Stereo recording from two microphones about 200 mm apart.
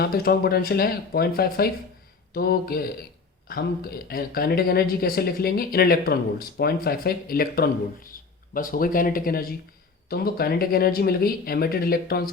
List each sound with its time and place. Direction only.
0.0 s speech: 50° left (ahead or behind)